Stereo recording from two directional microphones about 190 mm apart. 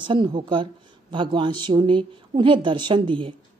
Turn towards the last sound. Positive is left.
turn(degrees=-25)  # may be behind; listen again after turning